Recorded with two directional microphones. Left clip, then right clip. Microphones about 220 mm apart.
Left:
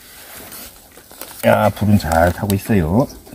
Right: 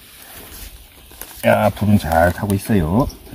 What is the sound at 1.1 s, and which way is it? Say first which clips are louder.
Speech: left 1 dB; 15° left (ahead or behind).